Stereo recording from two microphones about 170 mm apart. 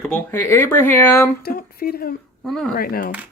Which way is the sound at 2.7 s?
60° left (ahead or behind).